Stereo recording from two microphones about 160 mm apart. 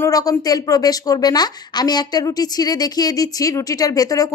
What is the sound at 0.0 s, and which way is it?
A woman's voice, 20° left (ahead or behind).